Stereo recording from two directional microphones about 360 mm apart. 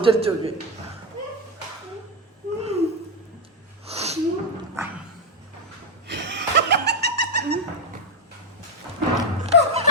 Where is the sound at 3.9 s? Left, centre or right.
Centre.